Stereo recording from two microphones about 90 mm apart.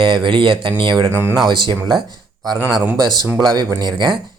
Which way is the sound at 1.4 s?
60° right (ahead or behind).